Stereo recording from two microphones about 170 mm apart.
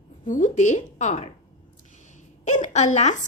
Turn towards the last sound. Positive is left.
turn(degrees=45)  # may be behind; listen again after turning